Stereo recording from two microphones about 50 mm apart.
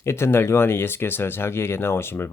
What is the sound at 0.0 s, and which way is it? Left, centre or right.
Speech, left.